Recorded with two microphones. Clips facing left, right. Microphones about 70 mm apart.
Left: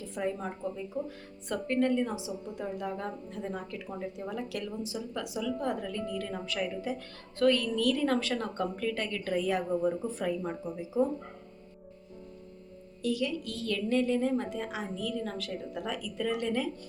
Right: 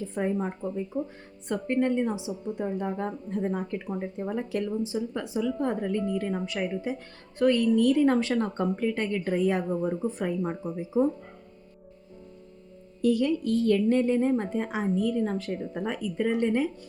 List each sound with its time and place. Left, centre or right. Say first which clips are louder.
0.0 s a woman's voice: right 5 dB; right
13.0 s a woman's voice: right 7 dB; right
15.2 s a woman's voice: right 7 dB; right